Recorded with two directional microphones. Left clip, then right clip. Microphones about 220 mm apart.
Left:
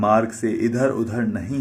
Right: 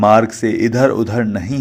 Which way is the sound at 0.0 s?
35° right (ahead or behind).